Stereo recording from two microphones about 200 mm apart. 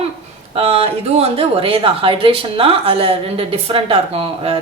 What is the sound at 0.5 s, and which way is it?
Speech, 30° right (ahead or behind).